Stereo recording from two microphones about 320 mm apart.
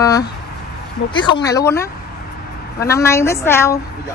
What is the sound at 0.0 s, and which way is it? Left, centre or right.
Speech, centre.